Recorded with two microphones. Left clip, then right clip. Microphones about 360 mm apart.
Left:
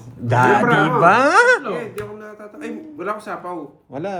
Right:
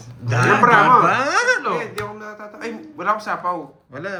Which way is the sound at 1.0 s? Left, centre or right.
Centre.